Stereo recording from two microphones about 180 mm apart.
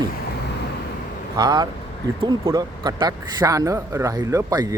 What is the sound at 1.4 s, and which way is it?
Speech, 25° right (ahead or behind).